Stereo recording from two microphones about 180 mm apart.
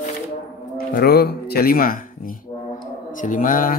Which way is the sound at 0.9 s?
60° left (ahead or behind).